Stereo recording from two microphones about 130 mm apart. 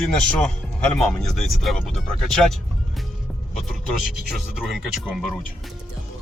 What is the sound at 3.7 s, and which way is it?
Speech, centre (ahead or behind).